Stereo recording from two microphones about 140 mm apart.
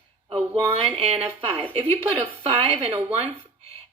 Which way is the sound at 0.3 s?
30° right (ahead or behind).